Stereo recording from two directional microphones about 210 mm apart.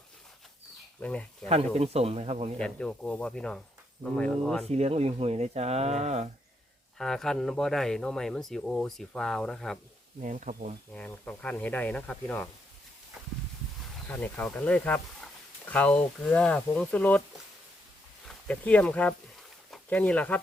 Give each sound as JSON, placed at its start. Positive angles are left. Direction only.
{"t": 0.9, "sound": "speech", "side_deg": 5}
{"t": 1.5, "sound": "speech", "side_deg": -30}
{"t": 2.6, "sound": "speech", "side_deg": 5}
{"t": 4.7, "sound": "speech", "side_deg": -30}
{"t": 7.0, "sound": "speech", "side_deg": 0}
{"t": 10.2, "sound": "speech", "side_deg": -35}
{"t": 10.9, "sound": "speech", "side_deg": 5}
{"t": 14.1, "sound": "speech", "side_deg": 5}
{"t": 18.3, "sound": "speech", "side_deg": 5}